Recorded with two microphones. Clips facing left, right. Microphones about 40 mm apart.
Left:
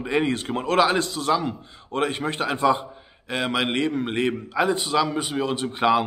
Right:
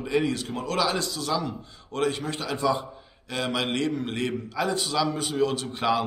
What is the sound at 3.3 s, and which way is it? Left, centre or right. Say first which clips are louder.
A man's voice: left 3 dB; left.